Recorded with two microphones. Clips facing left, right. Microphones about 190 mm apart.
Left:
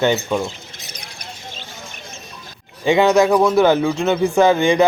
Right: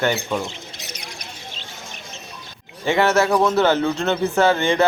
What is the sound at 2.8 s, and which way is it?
Speech, 15° left (ahead or behind).